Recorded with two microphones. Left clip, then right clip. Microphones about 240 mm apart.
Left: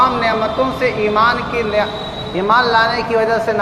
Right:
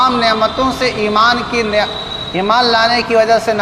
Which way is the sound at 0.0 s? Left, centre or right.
Right.